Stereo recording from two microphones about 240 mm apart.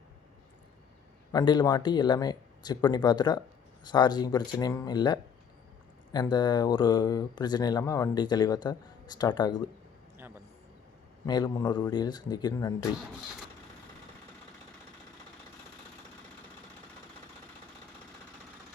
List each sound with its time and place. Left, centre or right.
1.3 s speech: centre
10.2 s a sound: centre
11.3 s speech: centre